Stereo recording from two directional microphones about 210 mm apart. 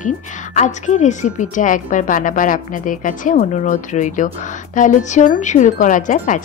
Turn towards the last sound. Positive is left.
turn(degrees=35)  # may be behind; listen again after turning